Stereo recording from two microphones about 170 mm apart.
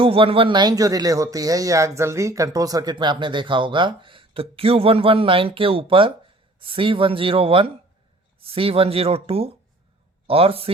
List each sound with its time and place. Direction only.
0.0 s speech: 35° right (ahead or behind)